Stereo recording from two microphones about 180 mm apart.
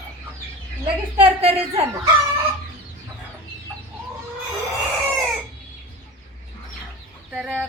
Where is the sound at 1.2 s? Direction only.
30° right (ahead or behind).